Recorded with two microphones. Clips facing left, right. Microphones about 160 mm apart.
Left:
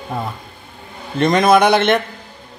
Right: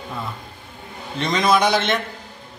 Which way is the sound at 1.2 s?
55° left (ahead or behind).